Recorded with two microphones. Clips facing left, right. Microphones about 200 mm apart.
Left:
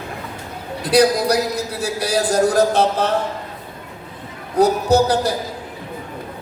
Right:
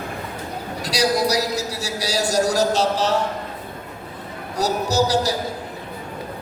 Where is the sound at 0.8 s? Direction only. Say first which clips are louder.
Left 6 dB; 55° left (ahead or behind).